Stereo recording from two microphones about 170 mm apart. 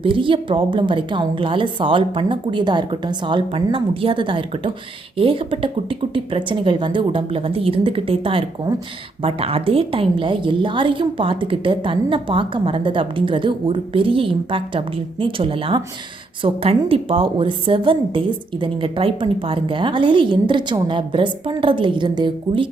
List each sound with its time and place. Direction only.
0.0 s a woman's voice: 30° right (ahead or behind)